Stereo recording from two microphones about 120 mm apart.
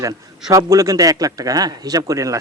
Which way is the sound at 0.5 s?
25° right (ahead or behind).